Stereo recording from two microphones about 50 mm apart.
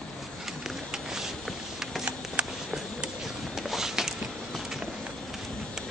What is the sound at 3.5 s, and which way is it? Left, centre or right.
Walk, centre.